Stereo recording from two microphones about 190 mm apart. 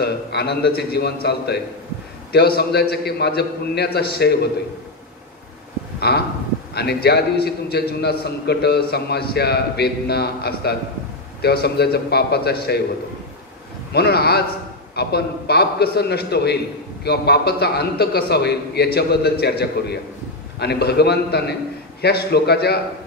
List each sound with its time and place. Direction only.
0.0 s a man's voice: 60° left (ahead or behind)
5.9 s a sound: 60° left (ahead or behind)
6.7 s a man's voice: 60° left (ahead or behind)
13.9 s a man's voice: 55° left (ahead or behind)